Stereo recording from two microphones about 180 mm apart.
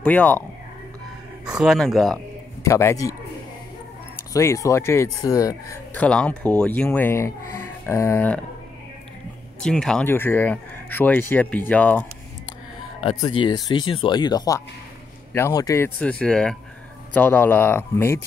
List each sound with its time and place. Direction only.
0.0 s speech: 5° left (ahead or behind)
1.4 s speech: 5° right (ahead or behind)
2.6 s speech: 15° left (ahead or behind)
4.3 s speech: 15° left (ahead or behind)
5.9 s speech: 5° left (ahead or behind)
9.6 s speech: 5° left (ahead or behind)
13.0 s speech: 30° left (ahead or behind); by 18.2 s 10° left (ahead or behind)